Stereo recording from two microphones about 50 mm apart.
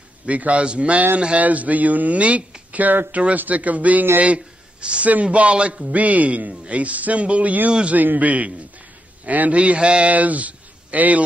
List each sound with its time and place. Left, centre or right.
0.3 s a man's voice: right
10.1 s speech: right